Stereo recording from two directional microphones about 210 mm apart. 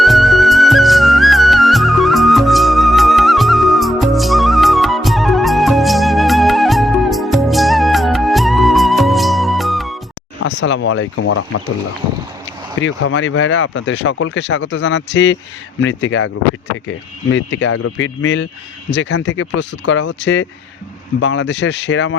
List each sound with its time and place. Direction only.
0.0 s music: centre (ahead or behind)
10.4 s speech: 65° left (ahead or behind); by 11.6 s 80° left
12.8 s speech: 70° left (ahead or behind)
17.3 s speech: 60° left (ahead or behind)